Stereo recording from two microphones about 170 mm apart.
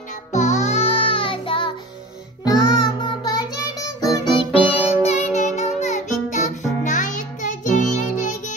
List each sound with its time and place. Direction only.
0.3 s music: 45° left (ahead or behind)